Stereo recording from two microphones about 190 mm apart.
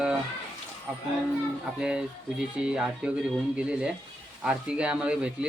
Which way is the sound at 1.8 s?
5° right (ahead or behind).